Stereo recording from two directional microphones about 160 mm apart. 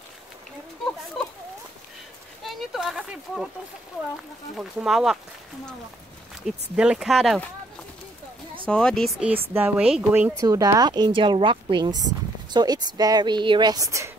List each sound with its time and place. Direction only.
2.4 s a sound: centre (ahead or behind)
4.6 s speech: centre (ahead or behind)
6.4 s speech: 5° right (ahead or behind)
8.6 s speech: 5° left (ahead or behind)
9.5 s speech: 10° right (ahead or behind)
10.4 s speech: 20° right (ahead or behind)